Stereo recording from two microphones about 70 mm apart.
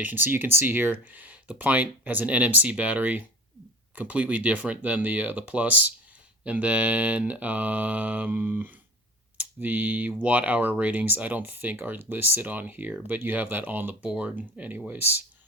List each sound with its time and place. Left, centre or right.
0.0 s speech: right